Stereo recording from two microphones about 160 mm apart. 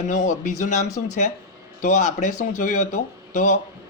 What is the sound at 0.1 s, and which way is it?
A man's voice, 55° left (ahead or behind).